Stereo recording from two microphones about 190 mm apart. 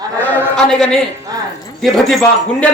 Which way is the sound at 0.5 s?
5° left (ahead or behind).